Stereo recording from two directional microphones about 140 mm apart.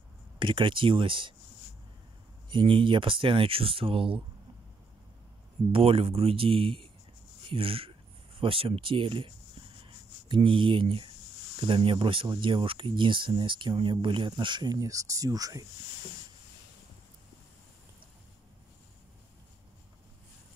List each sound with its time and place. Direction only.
0.4 s speech: 35° right (ahead or behind)
2.5 s speech: 40° right (ahead or behind)
5.7 s speech: 40° right (ahead or behind); by 15.6 s 25° right (ahead or behind)